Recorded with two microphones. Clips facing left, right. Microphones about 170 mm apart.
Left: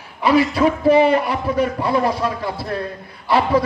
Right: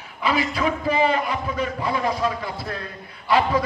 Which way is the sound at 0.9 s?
65° left (ahead or behind).